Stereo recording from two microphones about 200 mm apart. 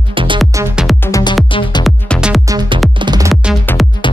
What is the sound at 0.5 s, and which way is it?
Music, 10° right (ahead or behind).